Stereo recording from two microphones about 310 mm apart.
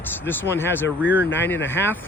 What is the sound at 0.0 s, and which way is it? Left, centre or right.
Speech, centre.